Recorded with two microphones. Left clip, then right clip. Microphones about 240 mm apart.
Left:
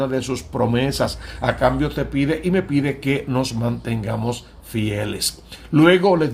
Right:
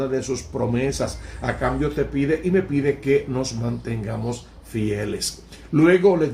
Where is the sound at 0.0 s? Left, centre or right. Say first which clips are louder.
Left 2 dB; left.